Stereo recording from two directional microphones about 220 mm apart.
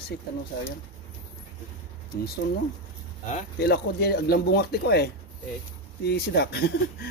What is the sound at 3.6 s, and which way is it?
Speech, 45° left (ahead or behind).